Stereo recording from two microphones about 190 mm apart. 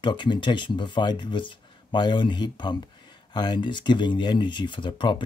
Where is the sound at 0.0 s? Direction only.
25° left (ahead or behind).